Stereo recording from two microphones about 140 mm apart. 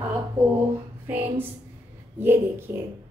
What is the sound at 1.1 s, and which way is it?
A woman's voice, 15° right (ahead or behind).